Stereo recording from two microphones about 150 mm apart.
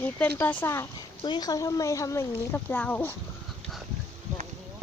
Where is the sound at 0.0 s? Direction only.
10° left (ahead or behind).